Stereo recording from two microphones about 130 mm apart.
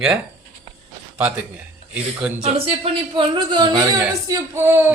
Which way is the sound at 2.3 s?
55° right (ahead or behind).